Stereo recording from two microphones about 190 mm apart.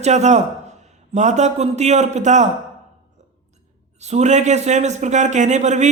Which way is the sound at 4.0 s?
35° right (ahead or behind).